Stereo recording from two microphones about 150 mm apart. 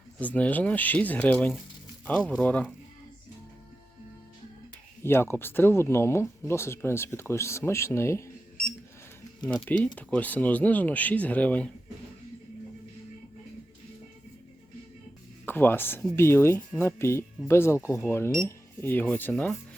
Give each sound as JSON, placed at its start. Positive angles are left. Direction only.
{"t": 0.2, "sound": "speech", "side_deg": 10}
{"t": 5.0, "sound": "speech", "side_deg": 15}
{"t": 9.6, "sound": "speech", "side_deg": 10}
{"t": 15.4, "sound": "speech", "side_deg": 15}